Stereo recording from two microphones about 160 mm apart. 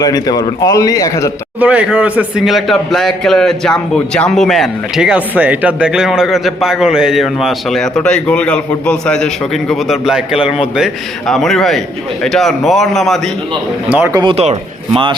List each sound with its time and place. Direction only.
0.0 s a man's voice: 25° left (ahead or behind)
1.5 s a man's voice: 10° right (ahead or behind)
13.9 s speech: 15° right (ahead or behind)
14.2 s speech: 35° right (ahead or behind)